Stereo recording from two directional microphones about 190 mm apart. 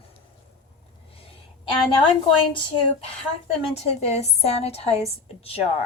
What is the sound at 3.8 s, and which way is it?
A woman's voice, 35° left (ahead or behind).